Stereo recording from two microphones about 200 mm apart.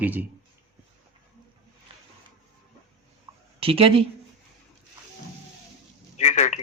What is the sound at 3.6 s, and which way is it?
Speech, 30° right (ahead or behind).